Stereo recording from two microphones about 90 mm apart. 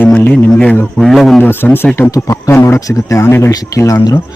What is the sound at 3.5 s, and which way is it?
Speech, 40° left (ahead or behind).